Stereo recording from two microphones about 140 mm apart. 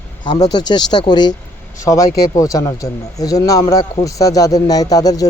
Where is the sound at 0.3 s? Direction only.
30° left (ahead or behind).